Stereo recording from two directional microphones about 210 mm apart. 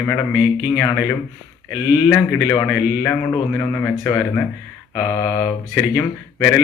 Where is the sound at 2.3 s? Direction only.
Centre (ahead or behind).